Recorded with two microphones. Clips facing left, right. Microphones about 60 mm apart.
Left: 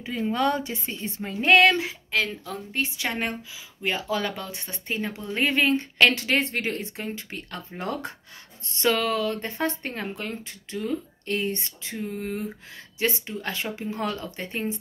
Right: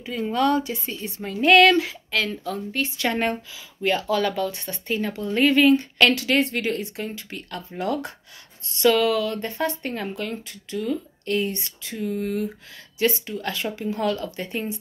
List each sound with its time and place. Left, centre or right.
0.0 s speech: left
3.1 s speech: centre
3.8 s speech: centre